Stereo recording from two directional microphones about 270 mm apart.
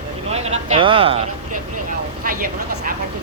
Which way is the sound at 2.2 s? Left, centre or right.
Right.